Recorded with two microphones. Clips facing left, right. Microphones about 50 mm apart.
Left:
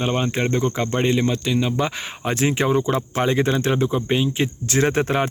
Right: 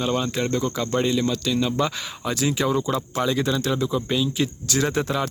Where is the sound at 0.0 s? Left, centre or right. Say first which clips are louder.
Left 2 dB; left.